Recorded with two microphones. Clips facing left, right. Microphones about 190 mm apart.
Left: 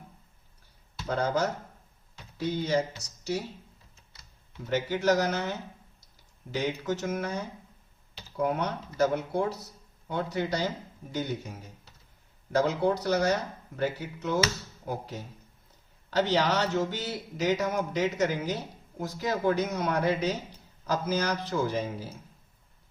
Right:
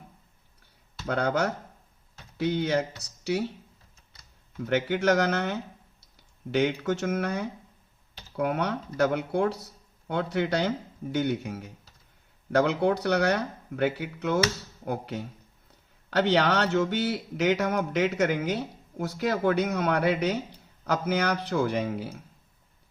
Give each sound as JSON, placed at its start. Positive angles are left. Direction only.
{"t": 1.0, "sound": "speech", "side_deg": -65}
{"t": 4.2, "sound": "speech", "side_deg": -55}